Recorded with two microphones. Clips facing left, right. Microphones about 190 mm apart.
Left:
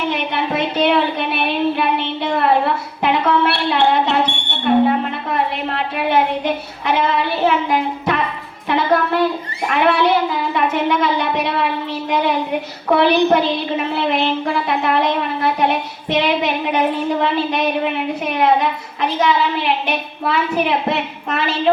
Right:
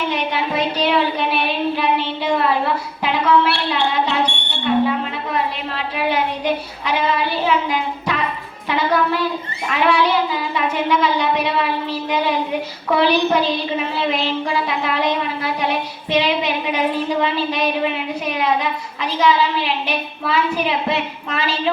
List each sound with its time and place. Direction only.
0.1 s a sound: 55° left (ahead or behind)
6.8 s child singing: 55° left (ahead or behind)
8.7 s a woman's voice: 55° left (ahead or behind)
12.9 s a woman's voice: 60° left (ahead or behind)